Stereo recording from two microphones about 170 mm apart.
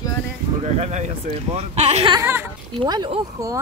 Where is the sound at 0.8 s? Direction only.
45° right (ahead or behind).